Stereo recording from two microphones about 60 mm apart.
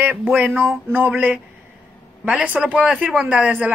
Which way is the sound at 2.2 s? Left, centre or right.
Right.